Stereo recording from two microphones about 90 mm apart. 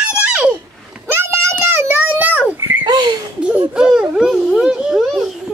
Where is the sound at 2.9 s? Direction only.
50° right (ahead or behind).